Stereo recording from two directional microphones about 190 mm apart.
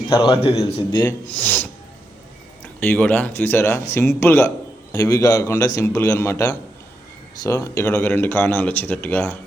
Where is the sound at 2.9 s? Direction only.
10° left (ahead or behind).